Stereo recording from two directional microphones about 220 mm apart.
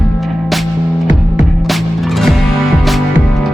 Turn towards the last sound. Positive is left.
turn(degrees=0)  # may be behind; listen again after turning